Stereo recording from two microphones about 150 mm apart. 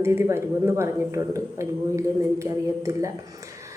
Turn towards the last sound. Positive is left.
turn(degrees=-20)  # may be behind; listen again after turning